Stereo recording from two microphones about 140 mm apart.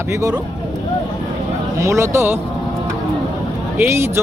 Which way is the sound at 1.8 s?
20° right (ahead or behind).